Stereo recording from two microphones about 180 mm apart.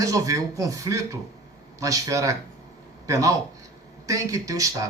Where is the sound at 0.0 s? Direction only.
20° right (ahead or behind).